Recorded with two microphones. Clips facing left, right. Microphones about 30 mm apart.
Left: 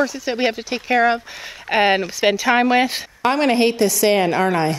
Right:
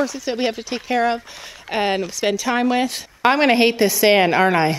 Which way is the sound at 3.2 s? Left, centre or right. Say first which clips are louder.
Right 2 dB; centre.